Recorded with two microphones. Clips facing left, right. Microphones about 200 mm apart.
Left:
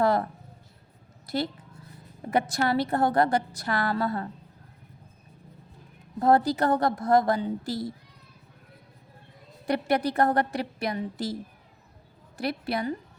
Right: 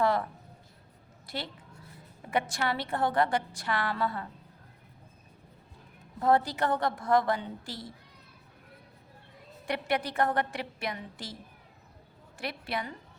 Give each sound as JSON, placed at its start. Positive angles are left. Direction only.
{"t": 0.0, "sound": "a sound", "side_deg": 40}
{"t": 1.3, "sound": "a woman's voice", "side_deg": 40}
{"t": 6.1, "sound": "a woman's voice", "side_deg": 40}
{"t": 9.6, "sound": "a woman's voice", "side_deg": 40}
{"t": 12.4, "sound": "a woman's voice", "side_deg": 40}